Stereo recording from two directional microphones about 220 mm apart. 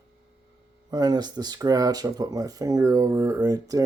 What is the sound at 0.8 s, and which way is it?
Speech, 20° right (ahead or behind).